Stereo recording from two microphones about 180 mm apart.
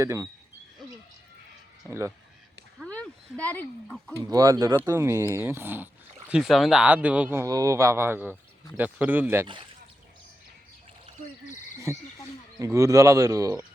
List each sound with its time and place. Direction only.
0.0 s speech: 15° right (ahead or behind)
1.9 s speech: 15° right (ahead or behind)
2.8 s speech: 5° left (ahead or behind)
4.2 s speech: 20° right (ahead or behind)
11.9 s speech: 15° right (ahead or behind)